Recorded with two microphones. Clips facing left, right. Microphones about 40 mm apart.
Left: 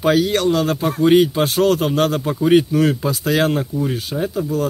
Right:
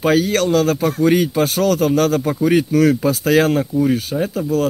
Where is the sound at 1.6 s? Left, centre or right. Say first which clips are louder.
Right 1 dB; left.